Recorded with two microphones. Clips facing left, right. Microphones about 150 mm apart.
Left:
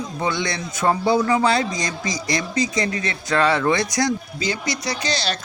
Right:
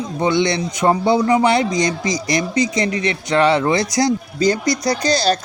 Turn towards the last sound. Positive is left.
turn(degrees=-40)  # may be behind; listen again after turning